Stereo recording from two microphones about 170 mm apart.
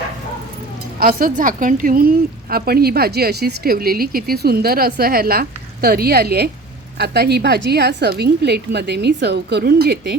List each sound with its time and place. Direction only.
0.9 s a woman's voice: 55° right (ahead or behind)